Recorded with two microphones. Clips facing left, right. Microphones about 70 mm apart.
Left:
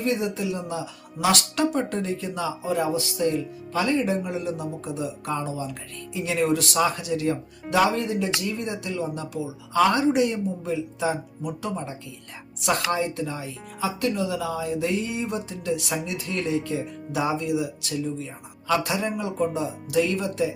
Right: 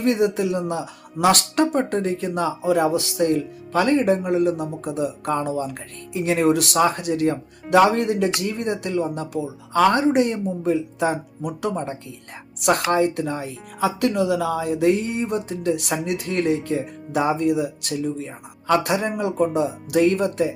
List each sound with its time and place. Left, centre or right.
0.0 s speech: right
7.7 s speech: right